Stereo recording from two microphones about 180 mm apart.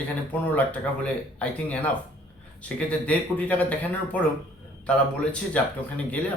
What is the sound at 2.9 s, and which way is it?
A man's voice, 5° left (ahead or behind).